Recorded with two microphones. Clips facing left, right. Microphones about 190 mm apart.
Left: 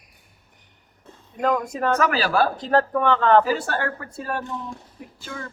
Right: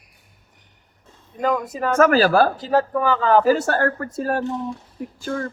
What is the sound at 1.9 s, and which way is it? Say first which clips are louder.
Speech: right 8 dB; 45° right (ahead or behind).